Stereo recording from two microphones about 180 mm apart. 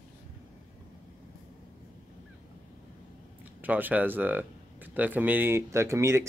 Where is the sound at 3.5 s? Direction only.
10° right (ahead or behind).